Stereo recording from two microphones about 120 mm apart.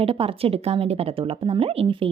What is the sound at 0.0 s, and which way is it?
Speech, 50° right (ahead or behind).